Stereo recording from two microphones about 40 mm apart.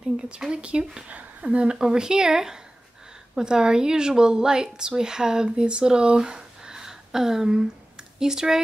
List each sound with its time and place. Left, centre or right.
0.4 s a woman's voice: right